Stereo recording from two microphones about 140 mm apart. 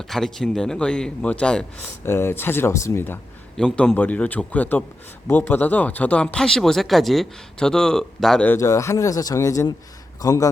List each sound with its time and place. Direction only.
0.1 s speech: centre (ahead or behind)
2.0 s speech: 20° left (ahead or behind)
3.6 s speech: 5° left (ahead or behind)
8.5 s speech: 25° left (ahead or behind)